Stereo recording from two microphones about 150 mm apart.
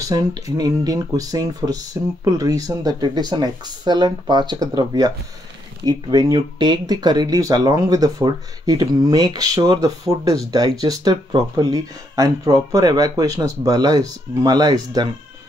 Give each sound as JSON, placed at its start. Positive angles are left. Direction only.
{"t": 0.0, "sound": "speech", "side_deg": -25}